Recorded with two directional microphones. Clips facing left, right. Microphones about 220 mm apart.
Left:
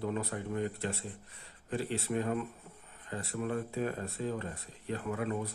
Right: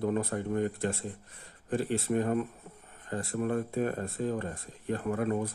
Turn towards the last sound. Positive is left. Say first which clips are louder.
# right 5 dB
turn(degrees=-45)  # may be behind; listen again after turning